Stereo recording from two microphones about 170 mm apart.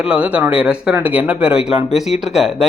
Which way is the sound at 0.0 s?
5° right (ahead or behind).